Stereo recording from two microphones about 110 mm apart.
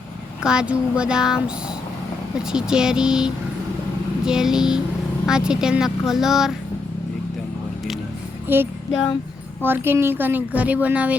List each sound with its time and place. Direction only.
0.4 s speech: 10° right (ahead or behind)
2.5 s speech: 5° right (ahead or behind)
8.5 s music: 20° right (ahead or behind)
9.6 s speech: 20° right (ahead or behind)